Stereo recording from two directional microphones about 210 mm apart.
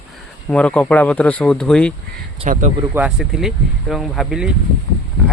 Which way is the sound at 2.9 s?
5° right (ahead or behind).